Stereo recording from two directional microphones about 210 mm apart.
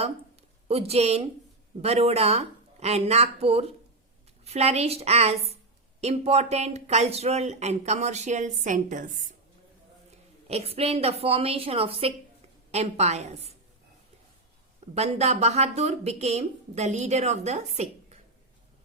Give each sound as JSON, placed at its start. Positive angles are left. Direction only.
{"t": 0.7, "sound": "speech", "side_deg": -30}
{"t": 10.5, "sound": "speech", "side_deg": -30}
{"t": 14.9, "sound": "speech", "side_deg": -30}